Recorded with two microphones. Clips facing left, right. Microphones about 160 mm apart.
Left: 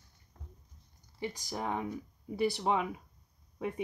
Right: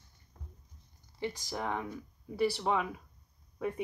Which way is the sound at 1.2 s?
15° left (ahead or behind).